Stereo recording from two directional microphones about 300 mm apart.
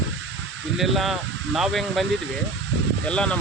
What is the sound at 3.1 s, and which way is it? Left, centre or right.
Speech, centre.